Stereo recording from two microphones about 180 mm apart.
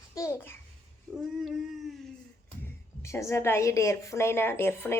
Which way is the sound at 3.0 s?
15° left (ahead or behind).